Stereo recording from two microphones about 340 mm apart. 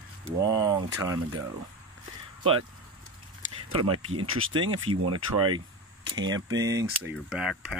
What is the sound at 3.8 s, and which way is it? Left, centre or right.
Speech, right.